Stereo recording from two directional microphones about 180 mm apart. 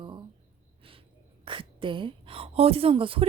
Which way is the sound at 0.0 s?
25° right (ahead or behind).